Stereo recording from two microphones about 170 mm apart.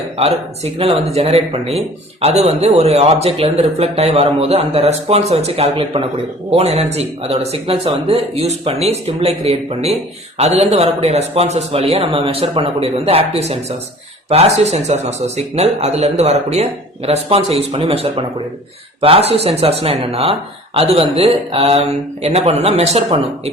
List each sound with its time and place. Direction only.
0.2 s a man's voice: 35° right (ahead or behind)